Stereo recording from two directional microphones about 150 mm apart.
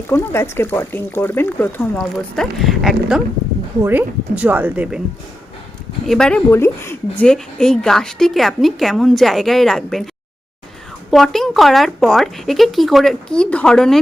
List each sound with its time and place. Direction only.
0.1 s speech: 15° left (ahead or behind)
2.0 s speech: centre (ahead or behind)
3.8 s a woman's voice: 15° right (ahead or behind)
6.1 s speech: 5° left (ahead or behind)
6.5 s a woman's voice: 15° left (ahead or behind)
7.3 s speech: 5° left (ahead or behind)
11.1 s speech: centre (ahead or behind)